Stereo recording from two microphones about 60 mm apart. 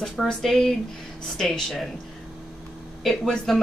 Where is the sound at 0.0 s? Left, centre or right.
Centre.